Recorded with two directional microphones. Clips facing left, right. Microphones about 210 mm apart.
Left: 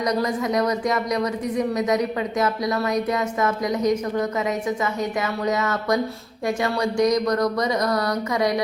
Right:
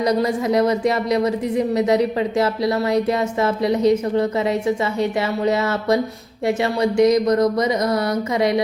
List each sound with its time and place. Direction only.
0.0 s a woman's voice: 30° right (ahead or behind)
5.5 s a woman's voice: 30° right (ahead or behind)